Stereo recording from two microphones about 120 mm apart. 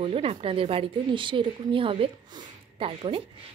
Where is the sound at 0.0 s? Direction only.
50° right (ahead or behind).